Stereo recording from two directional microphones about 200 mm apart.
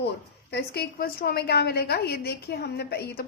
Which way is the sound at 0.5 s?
55° left (ahead or behind).